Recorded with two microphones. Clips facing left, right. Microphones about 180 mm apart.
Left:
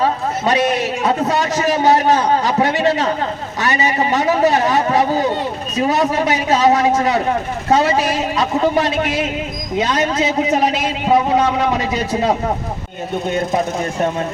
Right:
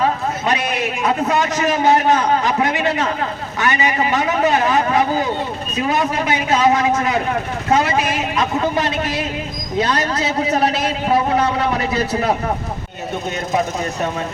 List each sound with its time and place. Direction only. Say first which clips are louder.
0.0 s a man's voice: left 1 dB; 30° left (ahead or behind)